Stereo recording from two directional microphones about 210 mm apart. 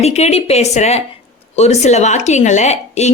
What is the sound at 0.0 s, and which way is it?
A woman's voice, 30° left (ahead or behind).